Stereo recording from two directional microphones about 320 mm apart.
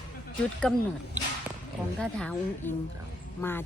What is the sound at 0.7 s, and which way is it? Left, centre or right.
Speech, centre.